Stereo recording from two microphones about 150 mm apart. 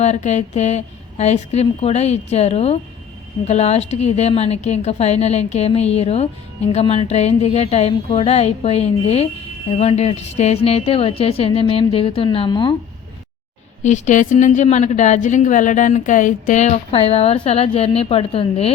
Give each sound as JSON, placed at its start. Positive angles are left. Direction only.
{"t": 0.0, "sound": "a woman's voice", "side_deg": 50}
{"t": 13.8, "sound": "a woman's voice", "side_deg": 50}